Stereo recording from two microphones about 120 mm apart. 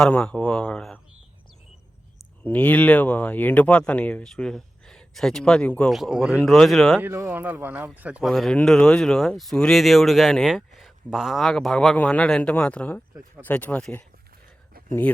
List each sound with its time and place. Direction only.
0.1 s speech: 10° left (ahead or behind)
2.4 s speech: 15° left (ahead or behind)
5.9 s speech: 5° right (ahead or behind)
7.0 s speech: 20° right (ahead or behind)
8.3 s speech: 5° left (ahead or behind)